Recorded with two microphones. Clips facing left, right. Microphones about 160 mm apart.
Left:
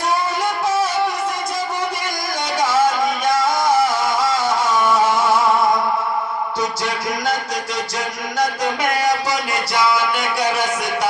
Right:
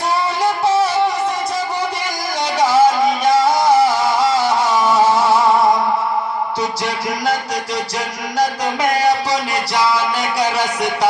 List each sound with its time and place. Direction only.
2.6 s music: 30° right (ahead or behind)
9.8 s music: 30° right (ahead or behind)